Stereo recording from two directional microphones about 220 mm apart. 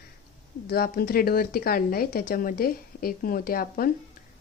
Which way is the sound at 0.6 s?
45° left (ahead or behind).